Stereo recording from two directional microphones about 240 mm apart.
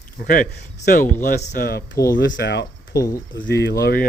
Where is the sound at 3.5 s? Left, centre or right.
Left.